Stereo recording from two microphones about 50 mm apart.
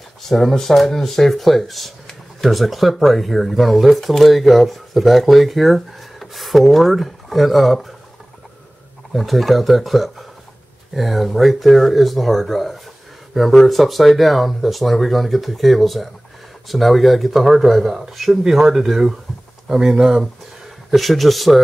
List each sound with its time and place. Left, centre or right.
0.2 s speech: centre
9.1 s speech: centre
20.9 s speech: centre